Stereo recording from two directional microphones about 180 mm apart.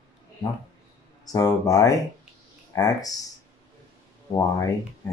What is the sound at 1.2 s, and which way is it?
Speech, 20° left (ahead or behind).